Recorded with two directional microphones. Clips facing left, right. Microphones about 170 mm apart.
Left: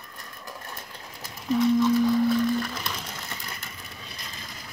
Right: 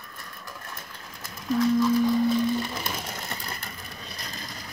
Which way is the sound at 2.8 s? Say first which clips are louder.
Right 2 dB; 35° right (ahead or behind).